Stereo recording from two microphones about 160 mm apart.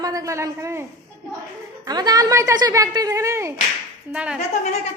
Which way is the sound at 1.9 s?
25° right (ahead or behind).